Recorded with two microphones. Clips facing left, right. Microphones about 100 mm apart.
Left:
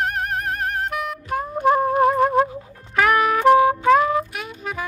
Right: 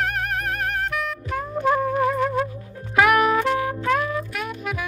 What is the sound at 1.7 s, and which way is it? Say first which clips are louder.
Wind instrument: left 4 dB; 50° left (ahead or behind).